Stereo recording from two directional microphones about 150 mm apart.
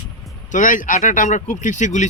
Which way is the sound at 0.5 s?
60° left (ahead or behind).